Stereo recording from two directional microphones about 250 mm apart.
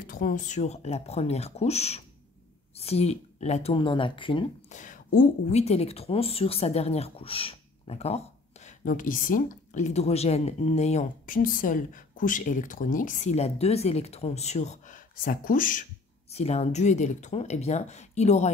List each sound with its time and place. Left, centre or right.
0.0 s speech: left